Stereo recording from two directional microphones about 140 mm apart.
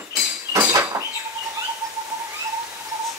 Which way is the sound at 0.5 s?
20° right (ahead or behind).